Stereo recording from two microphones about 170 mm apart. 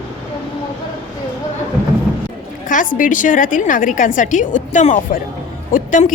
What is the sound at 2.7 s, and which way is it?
A woman's voice, 50° left (ahead or behind).